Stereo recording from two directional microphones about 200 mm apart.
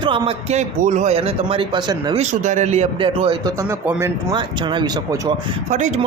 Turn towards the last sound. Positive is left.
turn(degrees=-35)  # may be behind; listen again after turning